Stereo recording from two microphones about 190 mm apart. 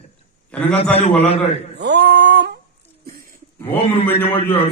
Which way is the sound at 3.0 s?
50° right (ahead or behind).